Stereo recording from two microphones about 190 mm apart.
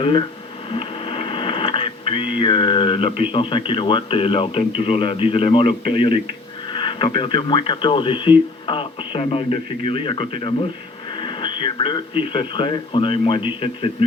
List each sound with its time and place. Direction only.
0.0 s speech: 25° left (ahead or behind)
11.1 s radio: 25° left (ahead or behind)
12.3 s speech: 25° left (ahead or behind)